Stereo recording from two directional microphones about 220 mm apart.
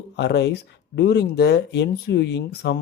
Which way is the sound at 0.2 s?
50° left (ahead or behind).